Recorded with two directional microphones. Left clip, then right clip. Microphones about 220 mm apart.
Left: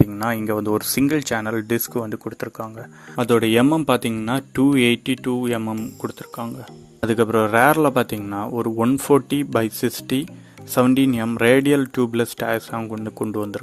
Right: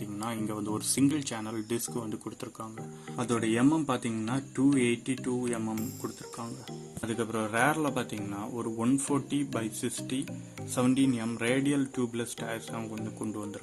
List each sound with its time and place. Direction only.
0.2 s speech: 35° left (ahead or behind)
7.0 s speech: 40° left (ahead or behind)